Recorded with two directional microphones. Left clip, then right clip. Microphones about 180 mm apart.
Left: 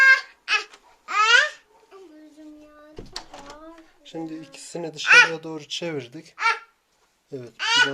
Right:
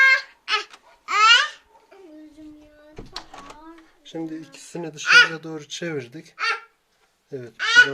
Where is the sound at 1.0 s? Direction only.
20° left (ahead or behind).